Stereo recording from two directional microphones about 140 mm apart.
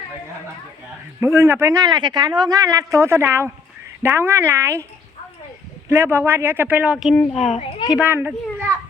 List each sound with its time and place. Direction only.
1.2 s speech: 15° right (ahead or behind)
5.9 s speech: 15° right (ahead or behind)
7.3 s a child's voice: 50° left (ahead or behind)
7.9 s speech: 10° right (ahead or behind)